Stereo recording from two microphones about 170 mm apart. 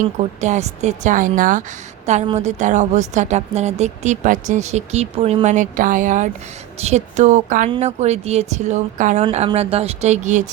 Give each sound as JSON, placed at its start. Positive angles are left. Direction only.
{"t": 0.0, "sound": "speech", "side_deg": -45}
{"t": 2.2, "sound": "a woman's voice", "side_deg": -40}